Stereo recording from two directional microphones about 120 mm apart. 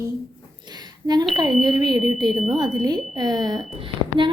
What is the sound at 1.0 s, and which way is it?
A woman's voice, 35° right (ahead or behind).